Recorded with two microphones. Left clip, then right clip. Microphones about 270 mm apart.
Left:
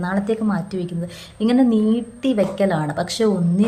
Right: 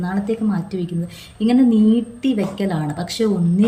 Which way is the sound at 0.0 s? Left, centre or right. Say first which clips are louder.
Left 1 dB; centre.